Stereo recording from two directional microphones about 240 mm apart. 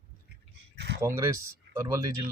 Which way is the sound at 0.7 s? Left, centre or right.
Right.